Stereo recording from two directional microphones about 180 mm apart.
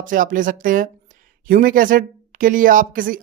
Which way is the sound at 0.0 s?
50° right (ahead or behind).